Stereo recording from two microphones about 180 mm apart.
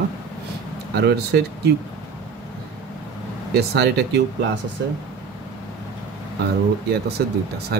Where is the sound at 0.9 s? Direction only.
65° right (ahead or behind).